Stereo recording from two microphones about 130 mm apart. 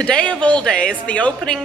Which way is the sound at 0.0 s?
10° left (ahead or behind).